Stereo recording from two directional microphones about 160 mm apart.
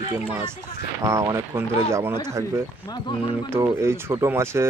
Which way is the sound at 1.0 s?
20° right (ahead or behind).